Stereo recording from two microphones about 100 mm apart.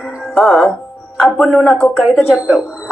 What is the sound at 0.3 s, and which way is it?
A man's voice, 10° left (ahead or behind).